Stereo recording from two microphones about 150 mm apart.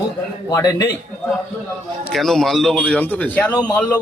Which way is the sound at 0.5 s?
20° left (ahead or behind).